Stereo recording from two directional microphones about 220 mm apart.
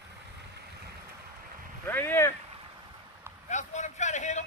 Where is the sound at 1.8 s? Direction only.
10° left (ahead or behind).